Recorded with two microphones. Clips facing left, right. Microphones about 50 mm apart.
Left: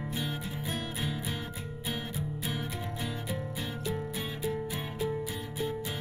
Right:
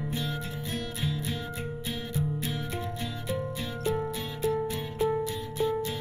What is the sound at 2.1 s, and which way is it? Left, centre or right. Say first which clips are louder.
Music: right 4 dB; centre.